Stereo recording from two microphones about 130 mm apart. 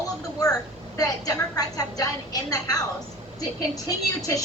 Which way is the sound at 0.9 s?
25° left (ahead or behind).